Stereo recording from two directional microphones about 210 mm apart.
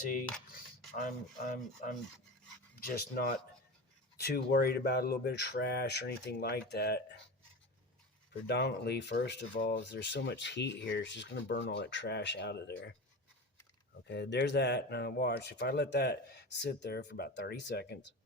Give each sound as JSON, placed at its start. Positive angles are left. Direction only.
{"t": 1.5, "sound": "rub", "side_deg": 40}
{"t": 2.7, "sound": "speech", "side_deg": 45}
{"t": 8.3, "sound": "speech", "side_deg": 55}
{"t": 9.6, "sound": "rub", "side_deg": 40}
{"t": 9.9, "sound": "speech", "side_deg": 55}
{"t": 14.1, "sound": "speech", "side_deg": 55}